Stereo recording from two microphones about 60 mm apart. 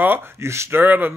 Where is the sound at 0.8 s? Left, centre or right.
Right.